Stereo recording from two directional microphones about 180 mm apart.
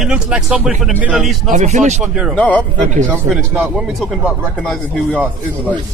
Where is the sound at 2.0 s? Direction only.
5° right (ahead or behind).